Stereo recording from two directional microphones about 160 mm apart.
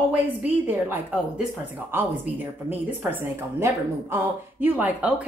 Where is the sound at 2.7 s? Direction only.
10° right (ahead or behind).